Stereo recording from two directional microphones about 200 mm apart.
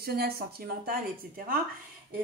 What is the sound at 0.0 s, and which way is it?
Speech, 50° right (ahead or behind).